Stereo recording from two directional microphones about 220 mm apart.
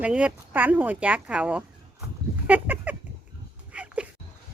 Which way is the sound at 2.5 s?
5° right (ahead or behind).